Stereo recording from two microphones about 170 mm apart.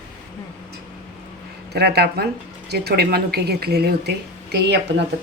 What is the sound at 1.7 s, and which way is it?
A woman's voice, 70° right (ahead or behind).